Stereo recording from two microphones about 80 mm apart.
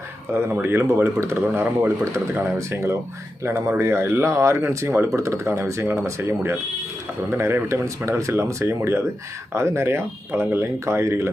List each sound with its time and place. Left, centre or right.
0.3 s speech: right
2.6 s speech: right